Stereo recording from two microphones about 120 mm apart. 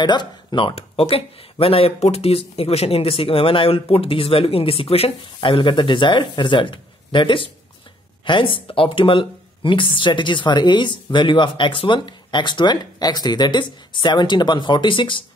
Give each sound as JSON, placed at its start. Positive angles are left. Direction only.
{"t": 0.0, "sound": "speech", "side_deg": 40}